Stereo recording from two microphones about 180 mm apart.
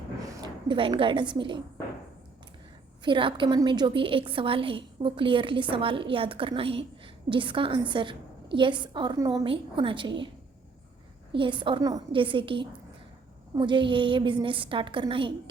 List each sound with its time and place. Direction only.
0.3 s a woman's voice: 25° right (ahead or behind)
3.0 s a woman's voice: 25° right (ahead or behind)
11.3 s a woman's voice: 25° right (ahead or behind)